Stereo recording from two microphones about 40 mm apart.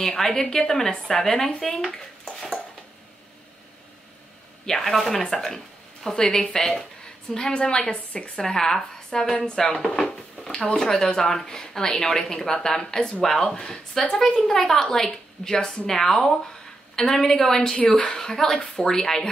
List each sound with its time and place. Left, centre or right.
0.0 s speech: centre
4.6 s a woman's voice: centre; by 8.3 s left
8.4 s speech: centre
13.5 s a woman's voice: left
17.7 s a woman's voice: left
18.1 s speech: centre